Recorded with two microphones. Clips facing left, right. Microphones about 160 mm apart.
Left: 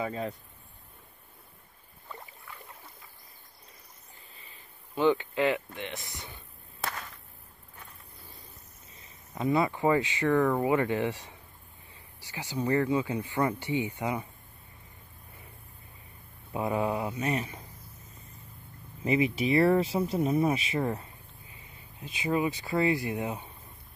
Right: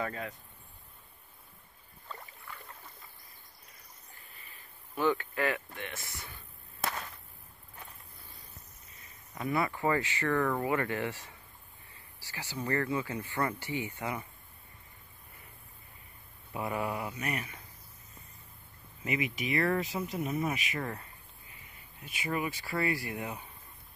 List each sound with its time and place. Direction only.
0.0 s speech: 20° left (ahead or behind)
4.9 s speech: 20° left (ahead or behind)
9.3 s speech: 20° left (ahead or behind)
16.5 s speech: 25° left (ahead or behind)
19.0 s speech: 30° left (ahead or behind)
22.2 s speech: 20° left (ahead or behind)